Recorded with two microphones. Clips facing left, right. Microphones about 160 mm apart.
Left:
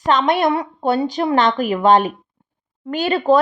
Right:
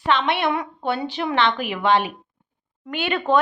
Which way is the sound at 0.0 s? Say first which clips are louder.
Left 5 dB; 40° left (ahead or behind).